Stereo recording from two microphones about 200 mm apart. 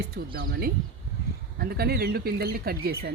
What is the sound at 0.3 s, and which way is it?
Speech, 50° right (ahead or behind).